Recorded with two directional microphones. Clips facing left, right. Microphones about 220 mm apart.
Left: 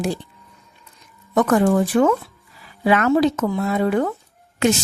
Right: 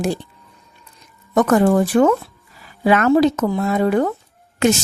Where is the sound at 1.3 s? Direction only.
45° right (ahead or behind).